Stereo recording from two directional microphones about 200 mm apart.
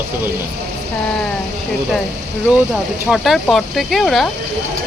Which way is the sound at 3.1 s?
Centre (ahead or behind).